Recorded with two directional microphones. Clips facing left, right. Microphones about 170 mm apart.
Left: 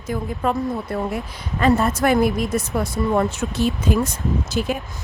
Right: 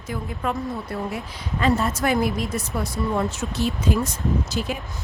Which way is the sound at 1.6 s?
55° left (ahead or behind).